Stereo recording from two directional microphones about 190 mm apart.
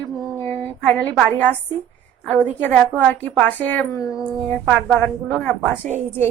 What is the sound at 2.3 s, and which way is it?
A woman's voice, 10° left (ahead or behind).